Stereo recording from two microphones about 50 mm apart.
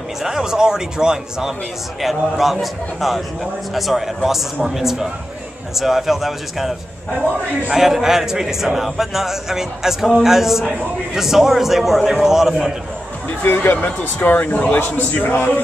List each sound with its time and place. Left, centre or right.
0.2 s a man's voice: centre
7.7 s a man's voice: centre
13.5 s speech: left